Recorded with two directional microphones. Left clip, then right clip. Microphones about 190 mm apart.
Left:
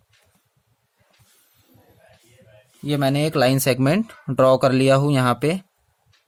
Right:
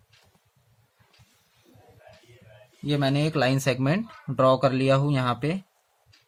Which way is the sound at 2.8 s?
45° left (ahead or behind).